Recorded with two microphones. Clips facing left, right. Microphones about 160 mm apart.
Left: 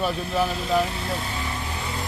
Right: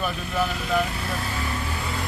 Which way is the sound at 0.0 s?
30° left (ahead or behind).